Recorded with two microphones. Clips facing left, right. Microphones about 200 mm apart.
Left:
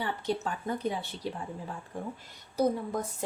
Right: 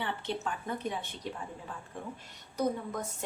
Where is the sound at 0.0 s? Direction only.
40° left (ahead or behind).